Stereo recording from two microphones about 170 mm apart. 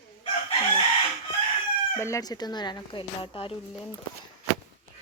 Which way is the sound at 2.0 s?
15° left (ahead or behind).